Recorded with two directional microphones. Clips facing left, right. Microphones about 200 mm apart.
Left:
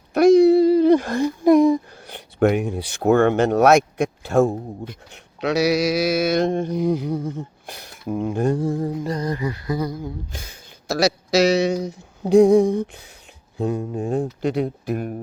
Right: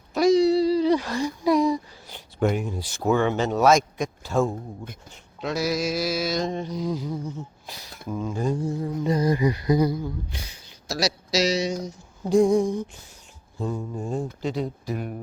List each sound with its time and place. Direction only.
0.1 s speech: 60° left (ahead or behind)
5.1 s mantra: 75° left (ahead or behind); by 8.8 s 55° left (ahead or behind)
9.0 s music: 10° right (ahead or behind)
10.3 s speech: 50° left (ahead or behind)
12.3 s mantra: 65° left (ahead or behind)